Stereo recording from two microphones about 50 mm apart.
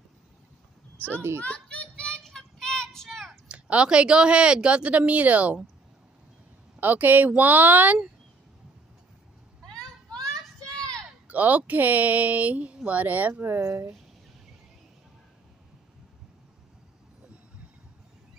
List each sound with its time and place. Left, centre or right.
1.4 s children playing: left
2.1 s child singing: centre
3.4 s speech: right
6.8 s speech: right
11.2 s speech: right
13.3 s speech: right